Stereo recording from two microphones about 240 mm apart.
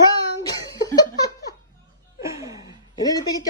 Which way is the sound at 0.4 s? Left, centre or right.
Centre.